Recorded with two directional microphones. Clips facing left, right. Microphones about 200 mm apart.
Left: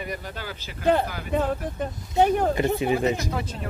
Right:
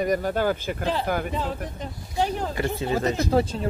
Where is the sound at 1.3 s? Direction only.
55° left (ahead or behind).